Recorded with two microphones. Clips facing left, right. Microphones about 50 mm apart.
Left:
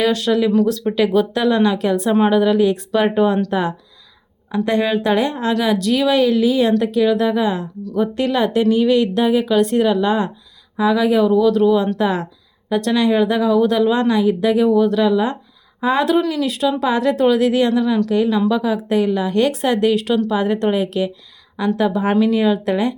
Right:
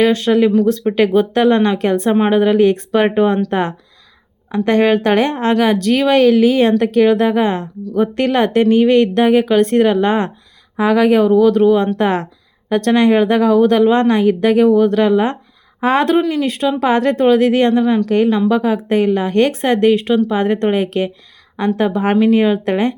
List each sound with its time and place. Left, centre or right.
0.0 s a woman's voice: right
11.9 s a woman's voice: right
12.6 s a woman's voice: right
16.3 s speech: right
16.8 s speech: right